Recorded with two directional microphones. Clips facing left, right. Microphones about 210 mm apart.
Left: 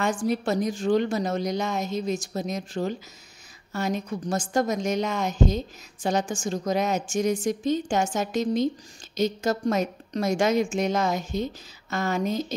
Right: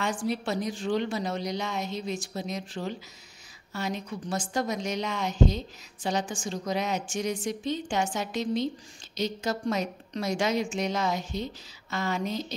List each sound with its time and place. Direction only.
0.0 s a woman's voice: 45° left (ahead or behind)